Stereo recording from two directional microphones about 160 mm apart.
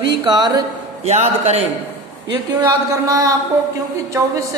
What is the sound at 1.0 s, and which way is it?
Speech, 45° right (ahead or behind).